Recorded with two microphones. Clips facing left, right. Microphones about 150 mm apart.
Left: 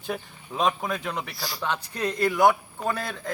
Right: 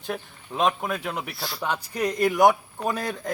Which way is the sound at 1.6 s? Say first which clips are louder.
Right 2 dB; 10° right (ahead or behind).